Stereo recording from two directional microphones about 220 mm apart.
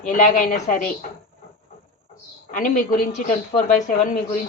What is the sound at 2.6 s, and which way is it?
Speech, 35° left (ahead or behind).